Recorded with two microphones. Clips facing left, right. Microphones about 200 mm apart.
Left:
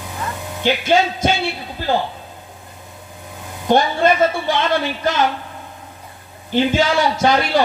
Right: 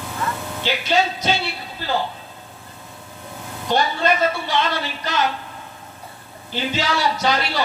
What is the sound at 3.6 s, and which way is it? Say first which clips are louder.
Speech: left 5 dB; 50° left (ahead or behind).